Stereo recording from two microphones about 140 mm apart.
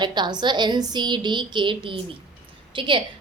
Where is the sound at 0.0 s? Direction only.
30° right (ahead or behind).